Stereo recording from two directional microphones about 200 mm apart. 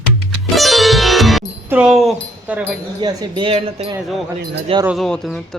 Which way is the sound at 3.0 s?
25° right (ahead or behind).